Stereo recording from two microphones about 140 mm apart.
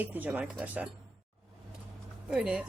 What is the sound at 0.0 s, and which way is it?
Speech, 10° right (ahead or behind).